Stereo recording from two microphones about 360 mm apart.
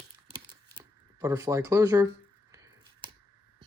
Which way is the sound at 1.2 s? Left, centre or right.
Centre.